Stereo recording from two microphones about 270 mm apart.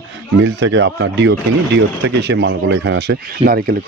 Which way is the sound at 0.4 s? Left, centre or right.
Right.